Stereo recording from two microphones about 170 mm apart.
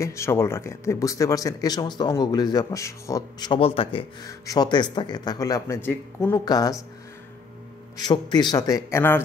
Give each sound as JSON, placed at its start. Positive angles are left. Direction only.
{"t": 0.0, "sound": "speech", "side_deg": 15}
{"t": 8.0, "sound": "speech", "side_deg": 25}